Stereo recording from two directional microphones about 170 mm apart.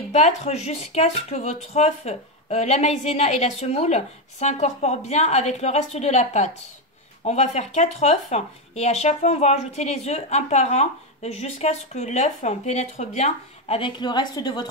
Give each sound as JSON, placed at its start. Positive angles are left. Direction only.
{"t": 0.1, "sound": "speech", "side_deg": 40}